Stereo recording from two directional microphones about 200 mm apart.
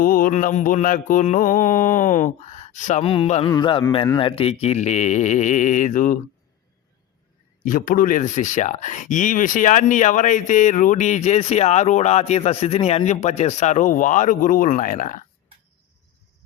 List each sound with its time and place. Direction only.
0.0 s speech: 45° left (ahead or behind)
7.6 s speech: 45° left (ahead or behind)